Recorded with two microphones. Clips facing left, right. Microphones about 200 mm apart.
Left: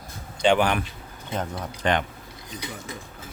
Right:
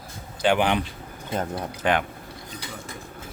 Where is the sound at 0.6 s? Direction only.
20° right (ahead or behind).